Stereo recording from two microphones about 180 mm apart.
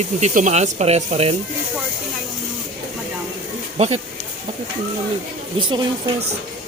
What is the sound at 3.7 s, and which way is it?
Speech, 35° right (ahead or behind).